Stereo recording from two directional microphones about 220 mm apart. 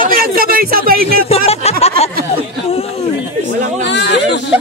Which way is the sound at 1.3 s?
30° left (ahead or behind).